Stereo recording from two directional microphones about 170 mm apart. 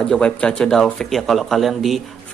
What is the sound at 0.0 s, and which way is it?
Speech, 5° left (ahead or behind).